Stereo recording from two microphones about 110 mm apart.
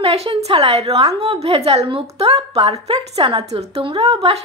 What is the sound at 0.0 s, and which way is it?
A woman's voice, 65° right (ahead or behind).